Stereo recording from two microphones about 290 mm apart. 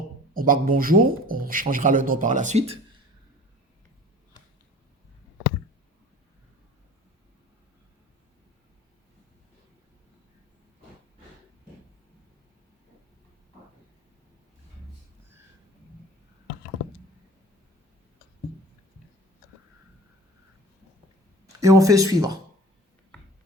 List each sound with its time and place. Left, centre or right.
0.3 s speech: right
21.6 s speech: centre